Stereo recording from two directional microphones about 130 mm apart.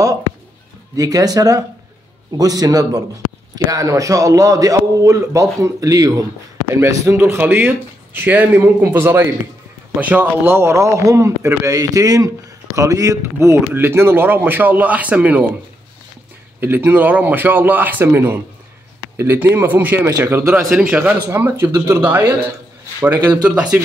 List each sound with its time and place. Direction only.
0.9 s a man's voice: 30° right (ahead or behind); by 15.4 s 10° right (ahead or behind)
16.5 s speech: 15° right (ahead or behind)
20.1 s a man's voice: 25° right (ahead or behind)
20.3 s a man's voice: 15° right (ahead or behind)
23.3 s speech: 10° right (ahead or behind)